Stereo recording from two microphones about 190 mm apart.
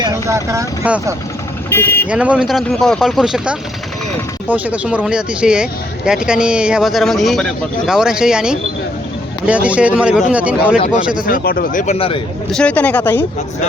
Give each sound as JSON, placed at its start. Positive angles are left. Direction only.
{"t": 0.0, "sound": "speech", "side_deg": -15}
{"t": 1.7, "sound": "speech", "side_deg": 10}
{"t": 2.0, "sound": "speech", "side_deg": -5}
{"t": 11.3, "sound": "speech", "side_deg": 50}
{"t": 11.9, "sound": "speech", "side_deg": 30}
{"t": 12.5, "sound": "speech", "side_deg": 5}